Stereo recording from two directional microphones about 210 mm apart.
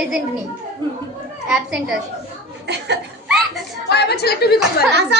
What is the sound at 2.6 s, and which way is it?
Speech, 55° right (ahead or behind).